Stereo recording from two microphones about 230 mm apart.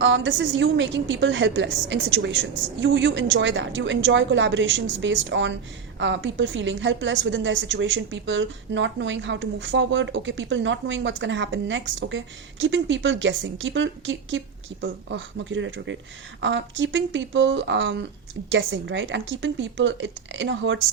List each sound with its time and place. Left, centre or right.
0.0 s a woman's voice: right